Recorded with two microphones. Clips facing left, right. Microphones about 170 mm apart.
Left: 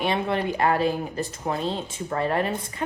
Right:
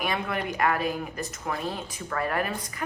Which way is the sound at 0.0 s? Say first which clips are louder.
Left 5 dB; 25° left (ahead or behind).